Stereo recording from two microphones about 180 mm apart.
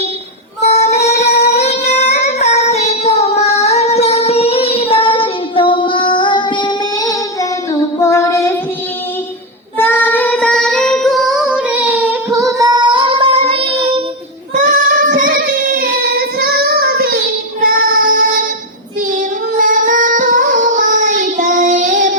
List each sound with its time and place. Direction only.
0.6 s female singing: 35° left (ahead or behind)
2.1 s singing: 35° left (ahead or behind); by 7.2 s 20° left (ahead or behind)
7.7 s music: 15° left (ahead or behind)
9.7 s child singing: 10° left (ahead or behind); by 14.0 s 30° right (ahead or behind)
14.5 s child singing: 45° right (ahead or behind)